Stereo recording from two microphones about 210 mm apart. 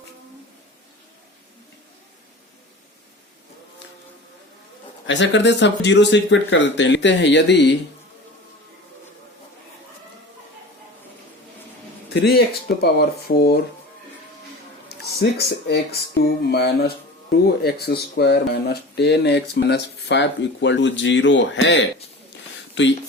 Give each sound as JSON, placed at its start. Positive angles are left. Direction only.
{"t": 5.0, "sound": "speech", "side_deg": 60}
{"t": 12.1, "sound": "speech", "side_deg": 50}
{"t": 15.2, "sound": "speech", "side_deg": 50}